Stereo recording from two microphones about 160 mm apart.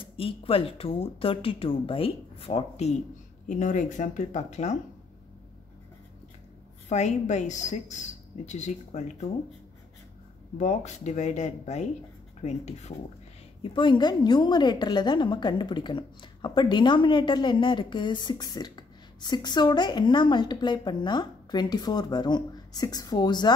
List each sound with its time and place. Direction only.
0.2 s speech: 35° left (ahead or behind)
3.4 s a woman's voice: 55° left (ahead or behind)
6.9 s a woman's voice: 45° left (ahead or behind)
10.6 s a woman's voice: 45° left (ahead or behind)
13.6 s a woman's voice: 30° left (ahead or behind)